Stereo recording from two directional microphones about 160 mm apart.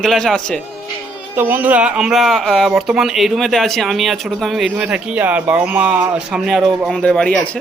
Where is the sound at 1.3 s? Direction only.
10° right (ahead or behind).